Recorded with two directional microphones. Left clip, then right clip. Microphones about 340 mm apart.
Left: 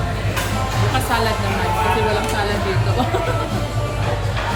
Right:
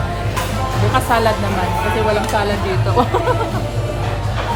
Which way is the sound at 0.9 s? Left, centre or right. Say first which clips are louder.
Right 5 dB; centre.